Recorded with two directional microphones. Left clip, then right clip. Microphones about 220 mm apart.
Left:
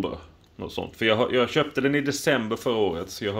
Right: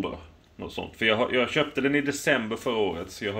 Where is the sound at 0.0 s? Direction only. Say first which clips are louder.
Left 2 dB; 30° left (ahead or behind).